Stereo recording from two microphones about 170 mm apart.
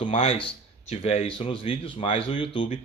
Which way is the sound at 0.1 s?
35° left (ahead or behind).